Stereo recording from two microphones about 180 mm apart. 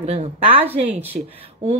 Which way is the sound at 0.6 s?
10° right (ahead or behind).